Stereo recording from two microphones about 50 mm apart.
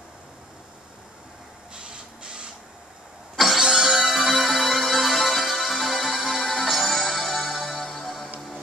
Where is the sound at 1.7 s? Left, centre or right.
Centre.